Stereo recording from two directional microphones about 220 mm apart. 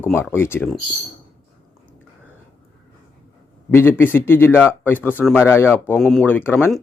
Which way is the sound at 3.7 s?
10° left (ahead or behind).